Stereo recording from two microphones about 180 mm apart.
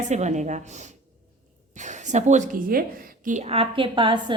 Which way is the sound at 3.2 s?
40° right (ahead or behind).